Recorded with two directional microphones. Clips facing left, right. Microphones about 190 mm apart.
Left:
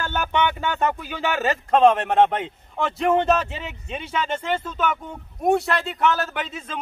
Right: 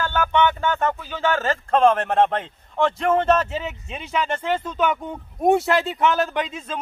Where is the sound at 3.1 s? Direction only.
Centre (ahead or behind).